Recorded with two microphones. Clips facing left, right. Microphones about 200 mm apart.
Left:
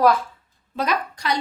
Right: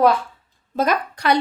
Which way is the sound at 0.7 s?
50° right (ahead or behind).